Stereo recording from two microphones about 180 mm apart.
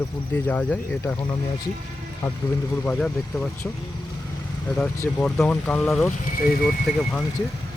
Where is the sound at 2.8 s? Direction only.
5° left (ahead or behind).